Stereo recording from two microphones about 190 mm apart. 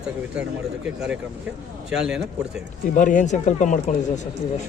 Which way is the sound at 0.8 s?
5° right (ahead or behind).